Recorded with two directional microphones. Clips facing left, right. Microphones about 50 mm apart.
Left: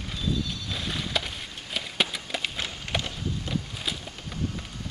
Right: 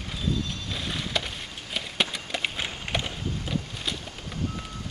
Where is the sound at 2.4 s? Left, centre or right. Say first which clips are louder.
Right 4 dB; centre.